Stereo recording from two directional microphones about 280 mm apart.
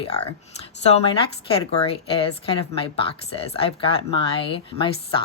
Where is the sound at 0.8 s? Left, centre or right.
Left.